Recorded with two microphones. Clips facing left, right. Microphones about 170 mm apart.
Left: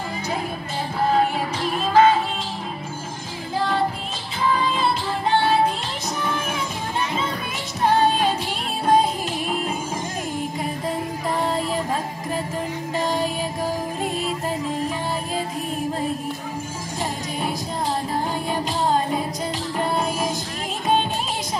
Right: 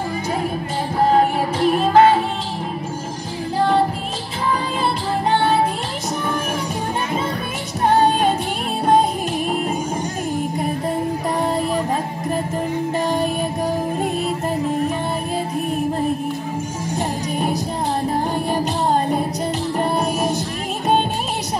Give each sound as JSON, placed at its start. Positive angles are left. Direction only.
{"t": 1.1, "sound": "music", "side_deg": -55}
{"t": 7.8, "sound": "music", "side_deg": -50}